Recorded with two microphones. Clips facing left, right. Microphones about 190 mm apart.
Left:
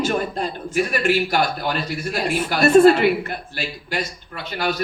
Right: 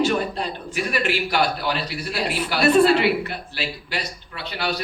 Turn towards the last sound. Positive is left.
turn(degrees=45)  # may be behind; listen again after turning